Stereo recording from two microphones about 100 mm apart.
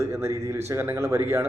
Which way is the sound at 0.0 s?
30° right (ahead or behind).